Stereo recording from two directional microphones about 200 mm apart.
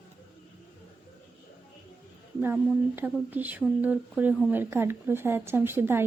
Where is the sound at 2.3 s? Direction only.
10° right (ahead or behind).